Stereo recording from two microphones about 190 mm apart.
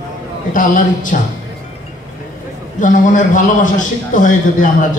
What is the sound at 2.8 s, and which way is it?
A man's voice, 40° left (ahead or behind).